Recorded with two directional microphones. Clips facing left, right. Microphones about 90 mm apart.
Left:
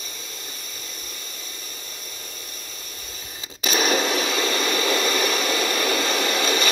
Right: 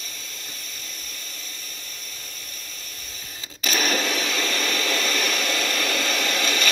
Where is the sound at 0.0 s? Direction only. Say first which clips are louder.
Left 2 dB; 15° left (ahead or behind).